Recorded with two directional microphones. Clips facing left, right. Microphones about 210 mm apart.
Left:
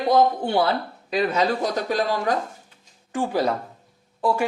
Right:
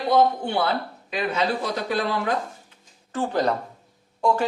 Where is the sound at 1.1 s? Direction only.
40° left (ahead or behind).